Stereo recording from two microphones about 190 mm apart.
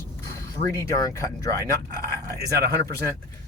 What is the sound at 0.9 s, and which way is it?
Speech, 20° left (ahead or behind).